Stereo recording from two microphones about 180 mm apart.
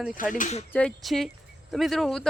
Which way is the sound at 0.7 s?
5° left (ahead or behind).